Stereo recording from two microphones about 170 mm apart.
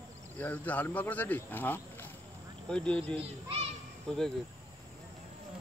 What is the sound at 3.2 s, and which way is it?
Speech, 35° right (ahead or behind).